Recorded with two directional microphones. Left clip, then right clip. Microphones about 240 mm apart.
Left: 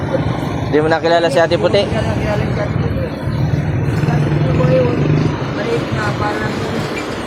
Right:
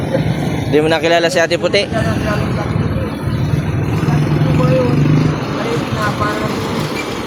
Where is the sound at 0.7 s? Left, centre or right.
Centre.